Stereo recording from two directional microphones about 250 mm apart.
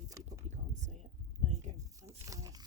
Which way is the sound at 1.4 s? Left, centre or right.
Right.